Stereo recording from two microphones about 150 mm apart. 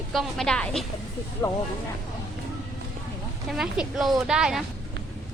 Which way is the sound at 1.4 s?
25° left (ahead or behind).